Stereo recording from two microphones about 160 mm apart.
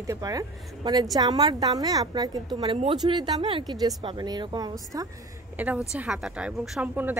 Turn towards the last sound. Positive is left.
turn(degrees=-5)  # may be behind; listen again after turning